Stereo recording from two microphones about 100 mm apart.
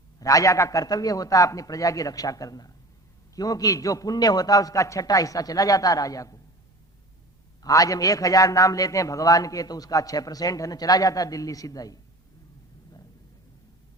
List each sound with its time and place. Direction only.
0.2 s a man's voice: 35° left (ahead or behind)
7.6 s a man's voice: 35° left (ahead or behind)